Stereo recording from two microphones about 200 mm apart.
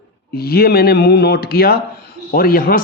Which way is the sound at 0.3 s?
50° left (ahead or behind).